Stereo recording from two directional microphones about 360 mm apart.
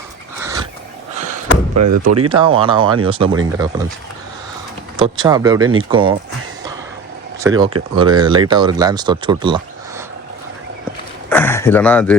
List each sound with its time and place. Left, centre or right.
0.3 s wild animals: centre
1.7 s speech: right
2.6 s speech: centre
4.9 s speech: centre
7.4 s speech: centre
11.3 s a sound: centre